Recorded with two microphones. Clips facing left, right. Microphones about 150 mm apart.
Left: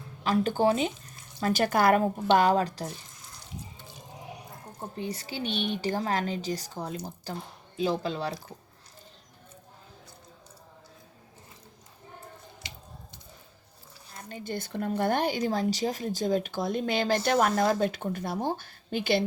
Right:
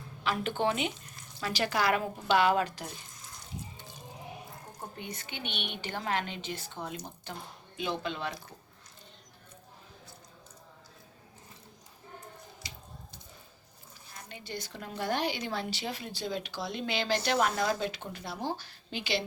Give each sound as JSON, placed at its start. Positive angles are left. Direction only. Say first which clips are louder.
{"t": 0.2, "sound": "speech", "louder": "left 6 dB", "side_deg": 40}
{"t": 1.4, "sound": "a woman's voice", "louder": "left 6 dB", "side_deg": 45}
{"t": 4.9, "sound": "speech", "louder": "left 10 dB", "side_deg": 35}
{"t": 14.3, "sound": "a woman's voice", "louder": "left 6 dB", "side_deg": 45}